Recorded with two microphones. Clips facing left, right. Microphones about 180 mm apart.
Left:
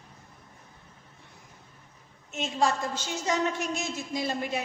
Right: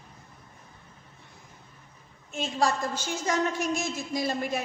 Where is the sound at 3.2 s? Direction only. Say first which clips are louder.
Right 1 dB; 45° right (ahead or behind).